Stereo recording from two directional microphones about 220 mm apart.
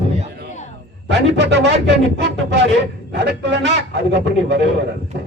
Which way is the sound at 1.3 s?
50° right (ahead or behind).